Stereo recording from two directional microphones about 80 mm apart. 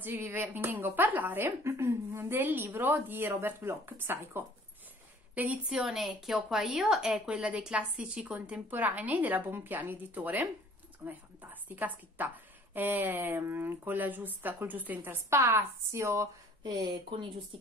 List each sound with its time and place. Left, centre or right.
0.0 s a woman's voice: right
5.7 s a woman's voice: centre
15.2 s a woman's voice: right
16.6 s speech: right